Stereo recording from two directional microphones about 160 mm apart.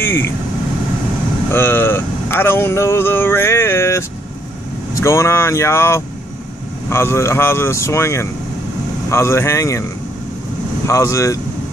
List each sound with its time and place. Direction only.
0.0 s speech: 15° left (ahead or behind)
1.5 s speech: 15° left (ahead or behind)
10.9 s speech: 20° left (ahead or behind)